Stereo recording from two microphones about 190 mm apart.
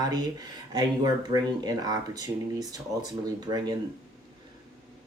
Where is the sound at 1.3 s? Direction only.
20° right (ahead or behind).